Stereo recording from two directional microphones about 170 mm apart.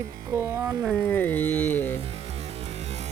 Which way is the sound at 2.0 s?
35° right (ahead or behind).